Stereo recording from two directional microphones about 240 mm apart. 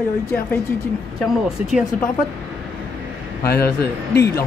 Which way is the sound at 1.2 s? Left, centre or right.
Centre.